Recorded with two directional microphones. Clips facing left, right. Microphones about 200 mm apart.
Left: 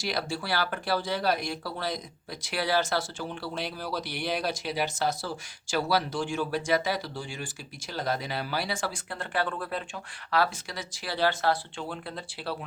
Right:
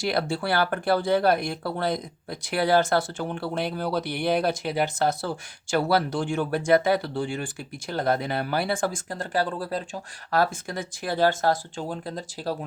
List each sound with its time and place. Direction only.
0.0 s speech: 55° right (ahead or behind)